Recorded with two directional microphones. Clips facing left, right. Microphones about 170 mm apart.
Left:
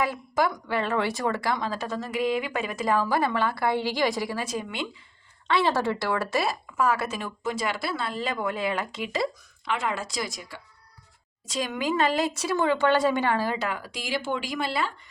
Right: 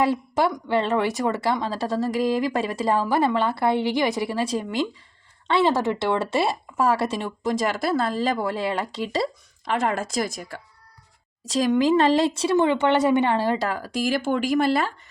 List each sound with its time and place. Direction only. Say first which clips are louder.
0.0 s speech: right 4 dB; 30° right (ahead or behind)
5.5 s speech: right 3 dB; 20° right (ahead or behind)
7.6 s speech: right 8 dB; 45° right (ahead or behind)
11.4 s speech: right 9 dB; 40° right (ahead or behind)